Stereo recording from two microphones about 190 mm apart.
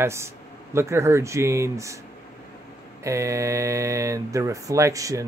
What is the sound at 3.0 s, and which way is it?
Speech, 15° right (ahead or behind).